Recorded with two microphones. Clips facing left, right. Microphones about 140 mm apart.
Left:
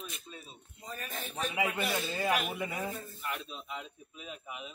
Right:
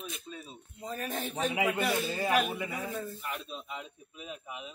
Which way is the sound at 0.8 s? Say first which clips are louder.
Right 6 dB; 65° right (ahead or behind).